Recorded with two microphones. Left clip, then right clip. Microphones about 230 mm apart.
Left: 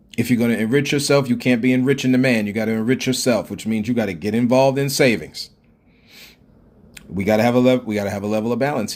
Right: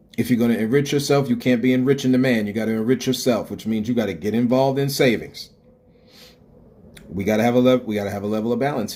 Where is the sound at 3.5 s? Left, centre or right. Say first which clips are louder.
Left 1 dB; left.